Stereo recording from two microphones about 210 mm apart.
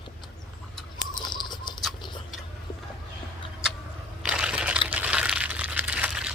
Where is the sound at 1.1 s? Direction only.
20° left (ahead or behind).